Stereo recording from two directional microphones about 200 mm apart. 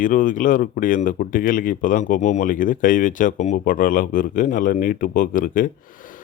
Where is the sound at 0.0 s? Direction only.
40° left (ahead or behind).